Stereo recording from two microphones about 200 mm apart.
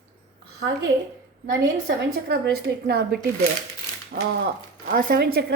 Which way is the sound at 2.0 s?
55° right (ahead or behind).